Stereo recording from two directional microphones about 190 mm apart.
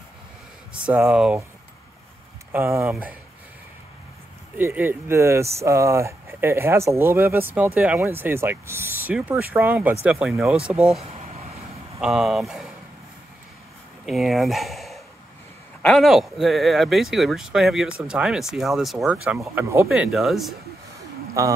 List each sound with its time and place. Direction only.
0.9 s speech: 5° right (ahead or behind)
2.5 s speech: 15° right (ahead or behind)
4.6 s speech: 10° right (ahead or behind)
14.0 s speech: centre (ahead or behind)
21.3 s speech: 15° right (ahead or behind)